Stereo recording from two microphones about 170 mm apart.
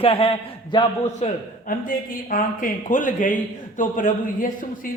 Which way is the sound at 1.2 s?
55° left (ahead or behind).